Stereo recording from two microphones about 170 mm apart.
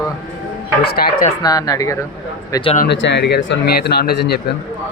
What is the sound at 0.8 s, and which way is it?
Speech, 65° left (ahead or behind).